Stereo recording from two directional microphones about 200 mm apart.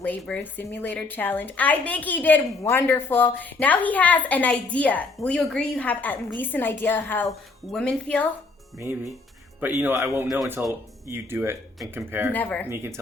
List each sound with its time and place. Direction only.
0.0 s a woman's voice: 5° left (ahead or behind)
9.6 s speech: 10° right (ahead or behind)
12.3 s a woman's voice: 10° left (ahead or behind)
12.6 s speech: 10° right (ahead or behind)